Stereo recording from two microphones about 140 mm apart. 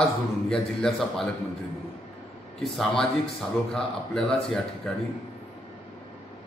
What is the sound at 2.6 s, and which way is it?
Speech, centre (ahead or behind).